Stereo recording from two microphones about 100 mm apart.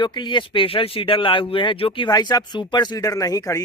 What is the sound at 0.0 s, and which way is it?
Speech, 50° left (ahead or behind).